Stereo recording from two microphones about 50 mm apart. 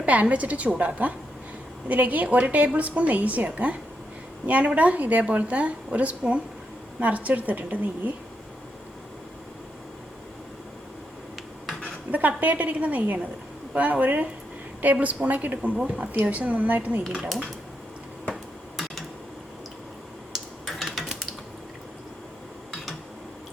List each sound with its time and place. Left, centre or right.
0.0 s a woman's voice: right
12.4 s a woman's voice: right
20.3 s a sound: centre